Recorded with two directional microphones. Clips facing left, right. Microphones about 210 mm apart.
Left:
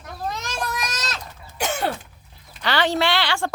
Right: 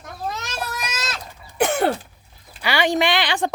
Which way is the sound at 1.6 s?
55° right (ahead or behind).